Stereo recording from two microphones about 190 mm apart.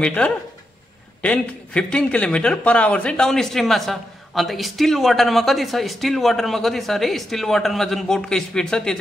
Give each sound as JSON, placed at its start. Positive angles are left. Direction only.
{"t": 0.0, "sound": "speech", "side_deg": 5}